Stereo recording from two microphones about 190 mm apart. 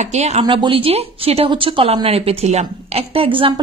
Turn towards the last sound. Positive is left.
turn(degrees=-25)  # may be behind; listen again after turning